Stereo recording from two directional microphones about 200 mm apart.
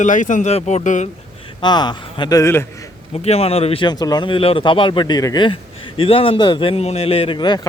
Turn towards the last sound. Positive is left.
turn(degrees=20)  # may be behind; listen again after turning